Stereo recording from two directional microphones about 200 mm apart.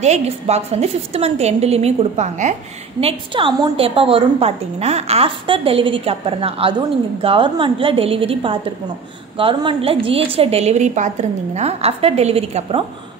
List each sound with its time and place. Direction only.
0.0 s a woman's voice: 35° right (ahead or behind)